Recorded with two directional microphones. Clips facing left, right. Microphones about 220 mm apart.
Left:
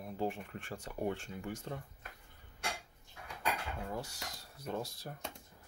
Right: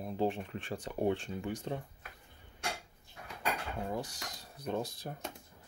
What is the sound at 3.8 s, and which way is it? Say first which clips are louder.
Speech: right 4 dB; 15° right (ahead or behind).